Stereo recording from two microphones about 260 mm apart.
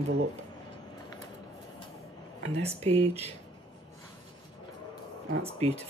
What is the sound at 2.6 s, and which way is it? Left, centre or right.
Speech, right.